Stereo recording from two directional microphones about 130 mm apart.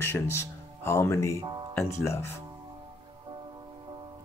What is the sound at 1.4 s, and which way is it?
Music, 35° right (ahead or behind).